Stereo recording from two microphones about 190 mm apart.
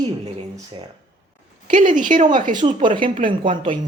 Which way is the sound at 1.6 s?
45° right (ahead or behind).